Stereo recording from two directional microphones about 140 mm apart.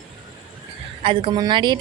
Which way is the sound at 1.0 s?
40° right (ahead or behind).